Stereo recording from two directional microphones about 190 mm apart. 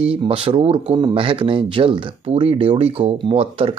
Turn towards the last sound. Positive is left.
turn(degrees=-30)  # may be behind; listen again after turning